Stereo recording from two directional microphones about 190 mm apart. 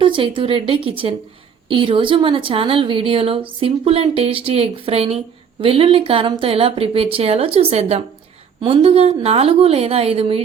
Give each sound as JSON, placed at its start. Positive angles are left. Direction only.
{"t": 0.0, "sound": "a woman's voice", "side_deg": -25}